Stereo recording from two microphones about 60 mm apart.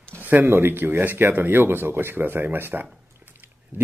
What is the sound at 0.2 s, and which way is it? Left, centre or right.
Speech, right.